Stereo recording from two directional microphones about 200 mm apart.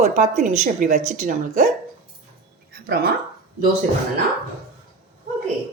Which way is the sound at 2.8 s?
55° right (ahead or behind).